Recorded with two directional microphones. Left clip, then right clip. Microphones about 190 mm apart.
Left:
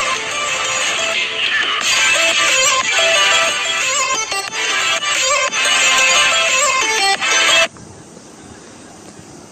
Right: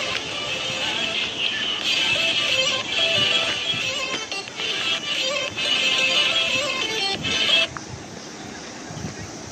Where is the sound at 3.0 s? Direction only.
90° left.